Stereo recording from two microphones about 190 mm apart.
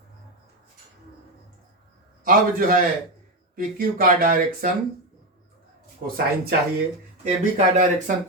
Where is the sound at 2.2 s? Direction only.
45° right (ahead or behind).